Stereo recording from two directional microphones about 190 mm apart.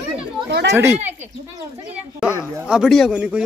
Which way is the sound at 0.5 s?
65° right (ahead or behind).